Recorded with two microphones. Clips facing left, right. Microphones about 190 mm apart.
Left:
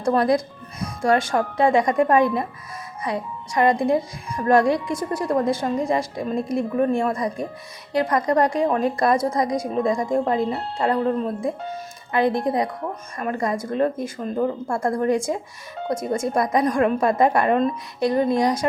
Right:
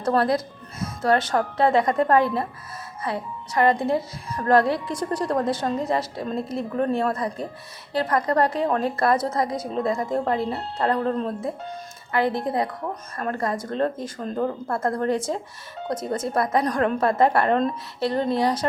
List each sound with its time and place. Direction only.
0.0 s speech: 15° left (ahead or behind)